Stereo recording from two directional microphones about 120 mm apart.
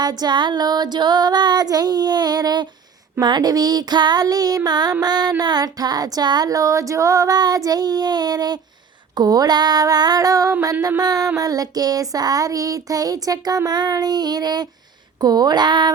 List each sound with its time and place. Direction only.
0.0 s child singing: 35° right (ahead or behind)